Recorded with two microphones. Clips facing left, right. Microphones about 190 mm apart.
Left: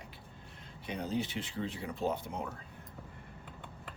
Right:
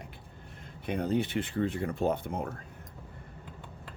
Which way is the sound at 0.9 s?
55° right (ahead or behind).